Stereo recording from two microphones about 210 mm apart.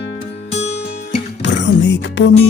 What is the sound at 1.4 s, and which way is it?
Music, 60° left (ahead or behind).